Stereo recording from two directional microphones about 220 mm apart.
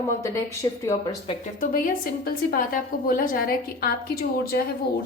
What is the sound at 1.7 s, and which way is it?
A woman's voice, 40° left (ahead or behind).